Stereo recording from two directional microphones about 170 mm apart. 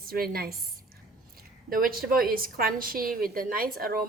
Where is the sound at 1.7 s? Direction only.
55° right (ahead or behind).